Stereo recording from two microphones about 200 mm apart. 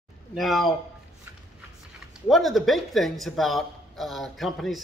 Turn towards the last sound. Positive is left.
turn(degrees=0)  # may be behind; listen again after turning